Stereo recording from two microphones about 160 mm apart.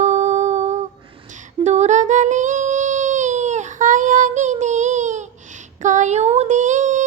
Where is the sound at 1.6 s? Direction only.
45° right (ahead or behind).